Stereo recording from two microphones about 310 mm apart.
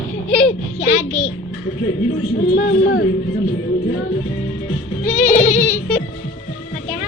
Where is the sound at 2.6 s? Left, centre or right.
Left.